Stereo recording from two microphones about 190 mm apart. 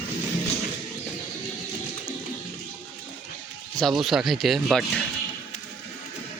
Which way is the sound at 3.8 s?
Centre (ahead or behind).